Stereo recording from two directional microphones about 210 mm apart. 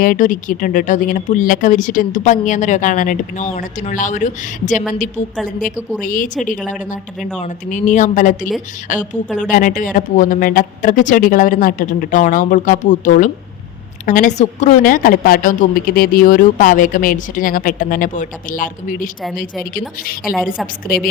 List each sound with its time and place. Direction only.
0.0 s a woman's voice: 40° left (ahead or behind)
20.2 s a woman's voice: centre (ahead or behind)
20.8 s a woman's voice: 45° left (ahead or behind)